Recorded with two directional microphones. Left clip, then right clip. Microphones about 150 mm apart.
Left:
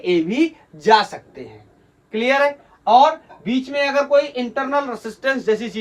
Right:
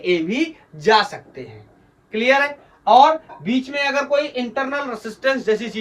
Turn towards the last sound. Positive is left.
turn(degrees=15)  # may be behind; listen again after turning